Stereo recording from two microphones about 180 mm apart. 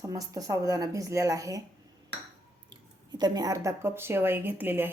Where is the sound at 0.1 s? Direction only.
20° right (ahead or behind).